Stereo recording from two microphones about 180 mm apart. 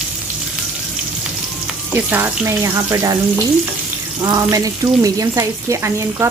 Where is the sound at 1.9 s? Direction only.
10° right (ahead or behind).